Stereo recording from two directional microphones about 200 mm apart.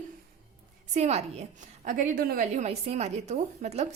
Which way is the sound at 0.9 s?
35° right (ahead or behind).